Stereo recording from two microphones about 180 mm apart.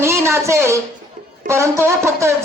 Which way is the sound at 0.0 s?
15° right (ahead or behind).